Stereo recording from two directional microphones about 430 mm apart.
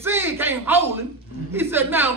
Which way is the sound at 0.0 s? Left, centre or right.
Centre.